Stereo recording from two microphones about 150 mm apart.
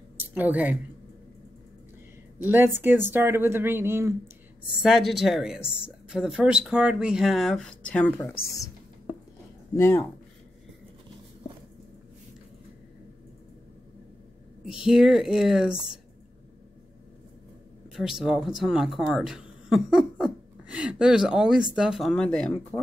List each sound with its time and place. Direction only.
0.2 s speech: 10° right (ahead or behind)
2.4 s speech: 15° right (ahead or behind)
4.8 s a woman's voice: centre (ahead or behind)
8.2 s speech: 20° left (ahead or behind)
9.8 s speech: 15° left (ahead or behind)
14.7 s a woman's voice: 5° right (ahead or behind)
17.9 s a woman's voice: 5° right (ahead or behind)